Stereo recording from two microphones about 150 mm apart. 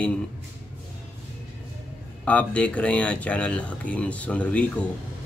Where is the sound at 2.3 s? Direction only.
10° left (ahead or behind).